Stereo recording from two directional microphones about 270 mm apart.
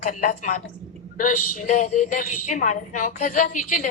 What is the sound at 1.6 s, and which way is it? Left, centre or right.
A woman's voice, left.